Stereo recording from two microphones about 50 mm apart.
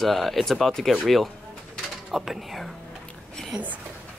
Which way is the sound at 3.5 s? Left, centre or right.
Centre.